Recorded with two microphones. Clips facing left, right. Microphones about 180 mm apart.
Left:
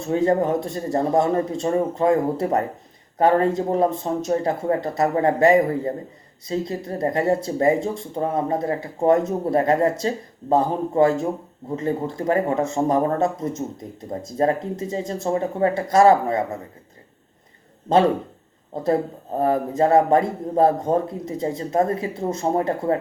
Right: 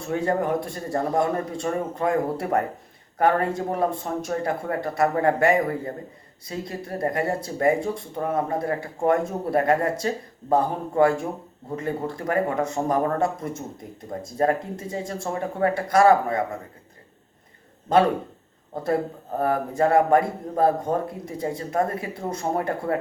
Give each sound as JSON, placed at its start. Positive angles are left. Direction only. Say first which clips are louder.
{"t": 0.1, "sound": "speech", "louder": "left 4 dB", "side_deg": 20}
{"t": 19.4, "sound": "speech", "louder": "left 3 dB", "side_deg": 20}